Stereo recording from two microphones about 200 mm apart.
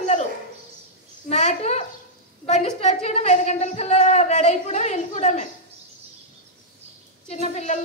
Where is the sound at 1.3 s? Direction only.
35° left (ahead or behind).